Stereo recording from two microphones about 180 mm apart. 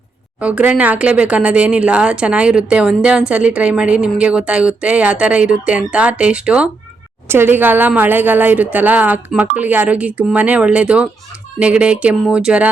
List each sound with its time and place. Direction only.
0.3 s speech: 5° right (ahead or behind)